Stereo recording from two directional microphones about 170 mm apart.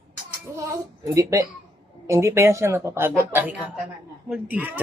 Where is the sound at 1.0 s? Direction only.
20° right (ahead or behind).